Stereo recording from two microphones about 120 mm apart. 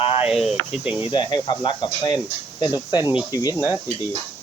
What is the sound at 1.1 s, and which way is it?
Speech, 40° left (ahead or behind).